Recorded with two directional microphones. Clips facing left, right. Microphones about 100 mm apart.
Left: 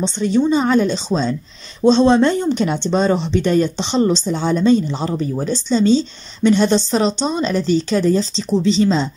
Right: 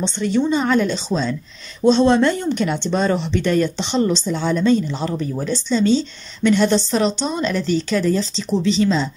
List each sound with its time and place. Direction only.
0.3 s speech: 20° left (ahead or behind)